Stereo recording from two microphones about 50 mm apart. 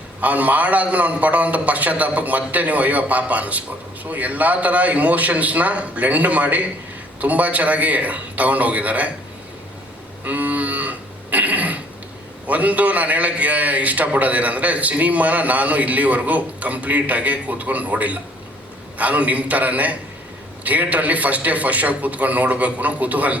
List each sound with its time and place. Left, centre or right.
0.2 s a man's voice: right
10.2 s moo: right
12.5 s a man's voice: right